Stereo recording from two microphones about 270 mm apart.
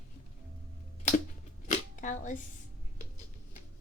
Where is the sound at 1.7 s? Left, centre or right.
Left.